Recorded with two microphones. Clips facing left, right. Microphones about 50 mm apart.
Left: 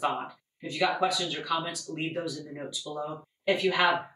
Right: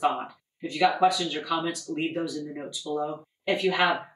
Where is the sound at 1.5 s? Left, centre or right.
Centre.